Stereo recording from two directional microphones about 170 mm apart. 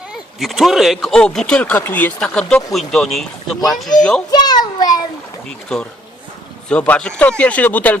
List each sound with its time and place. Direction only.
0.1 s speech: centre (ahead or behind)
4.3 s a sound: 25° left (ahead or behind)
5.5 s speech: 5° left (ahead or behind)